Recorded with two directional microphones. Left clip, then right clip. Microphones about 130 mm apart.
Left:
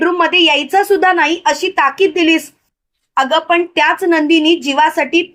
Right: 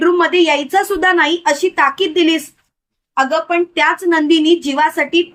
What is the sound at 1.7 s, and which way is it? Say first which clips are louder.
Speech: left 1 dB; 55° left (ahead or behind).